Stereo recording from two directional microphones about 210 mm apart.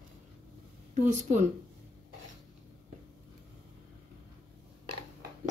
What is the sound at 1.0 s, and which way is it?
Speech, 35° right (ahead or behind).